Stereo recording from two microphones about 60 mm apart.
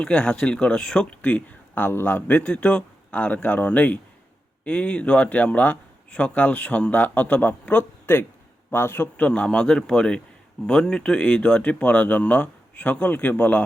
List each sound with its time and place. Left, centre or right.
0.0 s speech: centre
8.7 s a man's voice: left
9.1 s speech: left